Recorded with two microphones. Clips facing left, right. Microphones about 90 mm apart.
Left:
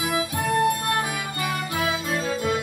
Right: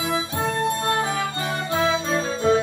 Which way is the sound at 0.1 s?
25° right (ahead or behind).